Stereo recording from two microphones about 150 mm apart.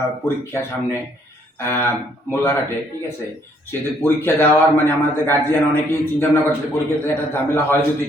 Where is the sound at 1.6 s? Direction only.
15° left (ahead or behind).